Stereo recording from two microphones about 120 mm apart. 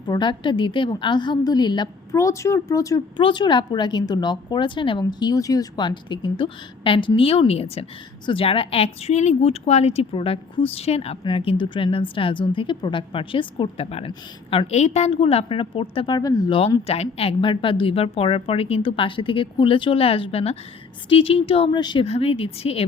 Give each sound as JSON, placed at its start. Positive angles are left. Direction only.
{"t": 0.0, "sound": "a woman's voice", "side_deg": 40}
{"t": 3.2, "sound": "a woman's voice", "side_deg": 40}
{"t": 11.2, "sound": "a woman's voice", "side_deg": 45}
{"t": 14.7, "sound": "a woman's voice", "side_deg": 70}
{"t": 16.1, "sound": "a woman's voice", "side_deg": 30}
{"t": 16.8, "sound": "a woman's voice", "side_deg": 55}
{"t": 21.8, "sound": "a woman's voice", "side_deg": 35}
{"t": 22.0, "sound": "a woman's voice", "side_deg": 55}